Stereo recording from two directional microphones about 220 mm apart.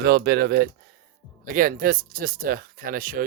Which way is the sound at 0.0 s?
45° right (ahead or behind).